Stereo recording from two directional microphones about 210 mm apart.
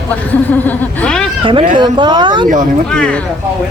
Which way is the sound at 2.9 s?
5° left (ahead or behind).